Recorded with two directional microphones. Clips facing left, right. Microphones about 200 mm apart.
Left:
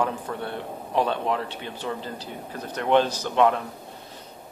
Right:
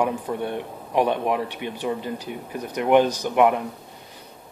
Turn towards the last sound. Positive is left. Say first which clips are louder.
# right 2 dB
turn(degrees=-15)  # may be behind; listen again after turning